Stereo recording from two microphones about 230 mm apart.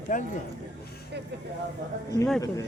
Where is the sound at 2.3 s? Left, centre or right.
Centre.